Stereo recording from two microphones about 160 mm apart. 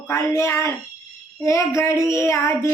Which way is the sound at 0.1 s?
15° left (ahead or behind).